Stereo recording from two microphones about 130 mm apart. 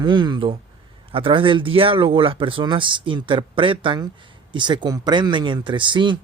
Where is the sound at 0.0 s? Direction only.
35° right (ahead or behind).